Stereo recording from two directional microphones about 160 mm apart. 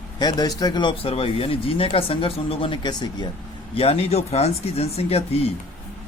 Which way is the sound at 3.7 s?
35° left (ahead or behind).